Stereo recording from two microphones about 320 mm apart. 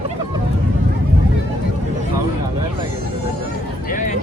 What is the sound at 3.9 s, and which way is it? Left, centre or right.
Speech, left.